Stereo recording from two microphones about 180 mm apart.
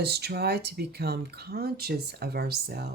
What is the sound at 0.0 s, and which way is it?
Speech, 65° right (ahead or behind).